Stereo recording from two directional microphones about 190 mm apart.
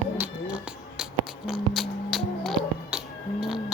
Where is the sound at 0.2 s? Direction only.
5° right (ahead or behind).